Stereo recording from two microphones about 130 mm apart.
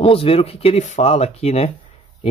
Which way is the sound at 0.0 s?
45° left (ahead or behind).